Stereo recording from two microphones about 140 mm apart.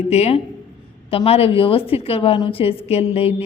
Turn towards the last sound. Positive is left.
turn(degrees=45)  # may be behind; listen again after turning